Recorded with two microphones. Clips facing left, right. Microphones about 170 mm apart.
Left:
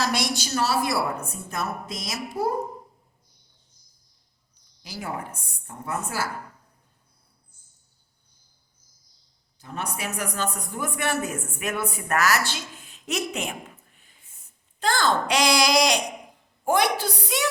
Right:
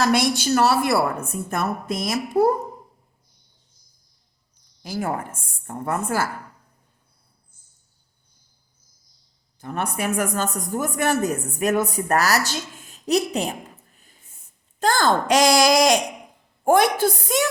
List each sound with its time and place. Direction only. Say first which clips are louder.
0.0 s a woman's voice: right 7 dB; 55° right (ahead or behind)
4.8 s a woman's voice: right 7 dB; 50° right (ahead or behind)
9.6 s a man's voice: right 6 dB; 55° right (ahead or behind)